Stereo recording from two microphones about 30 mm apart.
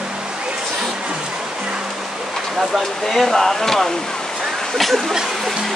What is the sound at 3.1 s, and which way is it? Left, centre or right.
Speech, centre.